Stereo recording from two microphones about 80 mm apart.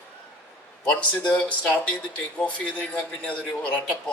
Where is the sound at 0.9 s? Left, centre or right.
Centre.